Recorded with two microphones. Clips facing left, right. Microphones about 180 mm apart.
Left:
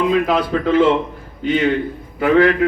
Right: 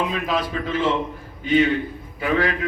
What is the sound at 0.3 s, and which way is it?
Speech, 65° left (ahead or behind).